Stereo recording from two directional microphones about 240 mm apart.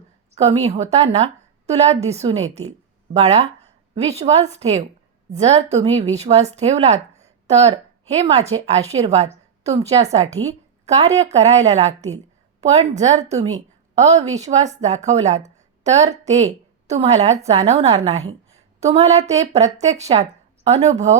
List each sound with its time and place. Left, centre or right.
0.3 s a woman's voice: right